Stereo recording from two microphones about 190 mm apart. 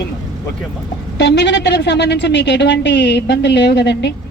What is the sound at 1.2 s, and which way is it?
A woman's voice, 65° left (ahead or behind).